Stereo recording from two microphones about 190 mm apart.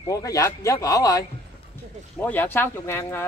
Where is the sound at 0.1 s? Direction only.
15° left (ahead or behind).